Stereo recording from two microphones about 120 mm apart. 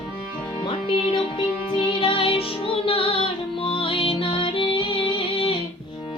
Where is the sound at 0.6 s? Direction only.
45° left (ahead or behind).